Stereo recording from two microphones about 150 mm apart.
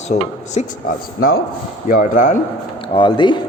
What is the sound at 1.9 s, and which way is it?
Speech, 60° left (ahead or behind).